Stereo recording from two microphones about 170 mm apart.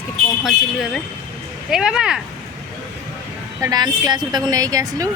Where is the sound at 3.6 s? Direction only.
25° right (ahead or behind).